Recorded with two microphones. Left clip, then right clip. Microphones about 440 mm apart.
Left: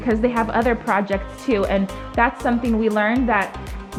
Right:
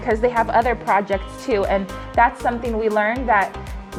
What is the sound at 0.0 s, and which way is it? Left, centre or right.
Speech, right.